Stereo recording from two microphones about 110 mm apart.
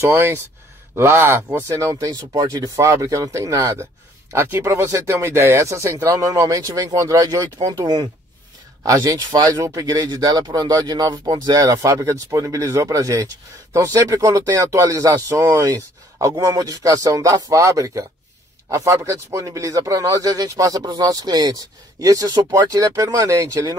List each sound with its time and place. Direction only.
0.0 s speech: 20° right (ahead or behind)